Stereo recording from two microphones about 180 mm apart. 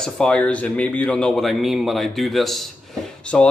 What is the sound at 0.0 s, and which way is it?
Speech, 5° left (ahead or behind).